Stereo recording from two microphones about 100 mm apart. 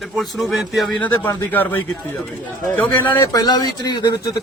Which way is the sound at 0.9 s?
15° left (ahead or behind).